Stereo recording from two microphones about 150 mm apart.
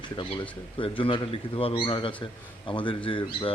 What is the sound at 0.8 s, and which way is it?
Speech, 35° left (ahead or behind).